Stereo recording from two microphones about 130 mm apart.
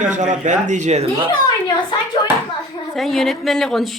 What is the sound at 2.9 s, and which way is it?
A woman's voice, centre (ahead or behind).